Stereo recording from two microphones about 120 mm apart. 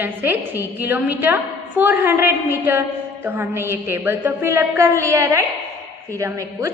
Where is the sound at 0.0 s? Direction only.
15° right (ahead or behind).